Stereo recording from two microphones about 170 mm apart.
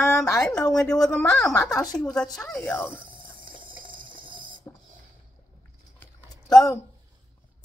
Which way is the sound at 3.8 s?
55° right (ahead or behind).